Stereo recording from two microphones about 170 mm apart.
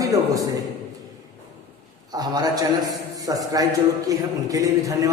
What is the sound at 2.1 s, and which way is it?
A man's voice, 25° right (ahead or behind).